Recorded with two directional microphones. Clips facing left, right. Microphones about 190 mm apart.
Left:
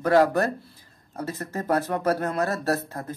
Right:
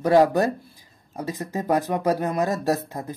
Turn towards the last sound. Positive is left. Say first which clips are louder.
# right 2 dB
turn(degrees=-15)  # may be behind; listen again after turning